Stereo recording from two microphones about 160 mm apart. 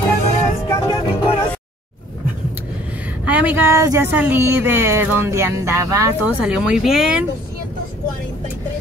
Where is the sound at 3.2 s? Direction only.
10° right (ahead or behind).